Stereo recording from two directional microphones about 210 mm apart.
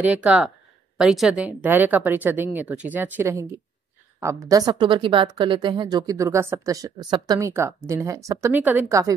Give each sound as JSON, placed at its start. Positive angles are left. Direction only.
{"t": 0.0, "sound": "a woman's voice", "side_deg": -5}